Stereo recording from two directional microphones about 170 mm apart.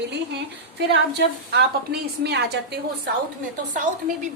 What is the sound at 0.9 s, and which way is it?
A woman's voice, 80° right.